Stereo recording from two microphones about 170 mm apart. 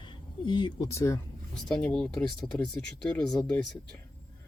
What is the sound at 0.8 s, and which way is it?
Speech, 15° left (ahead or behind).